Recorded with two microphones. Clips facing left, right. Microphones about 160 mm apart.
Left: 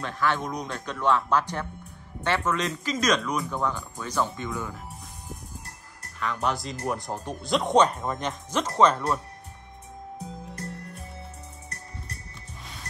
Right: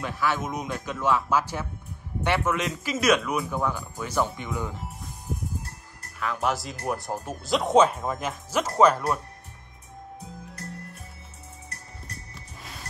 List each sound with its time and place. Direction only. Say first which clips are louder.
0.0 s speech: even; 5° right (ahead or behind)
5.3 s a sound: right 9 dB; centre (ahead or behind)
6.1 s speech: right 1 dB; 5° right (ahead or behind)